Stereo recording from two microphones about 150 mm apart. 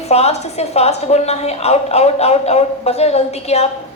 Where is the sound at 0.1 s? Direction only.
45° left (ahead or behind).